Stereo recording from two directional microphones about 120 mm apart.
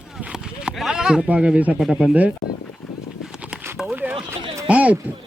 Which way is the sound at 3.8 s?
10° right (ahead or behind).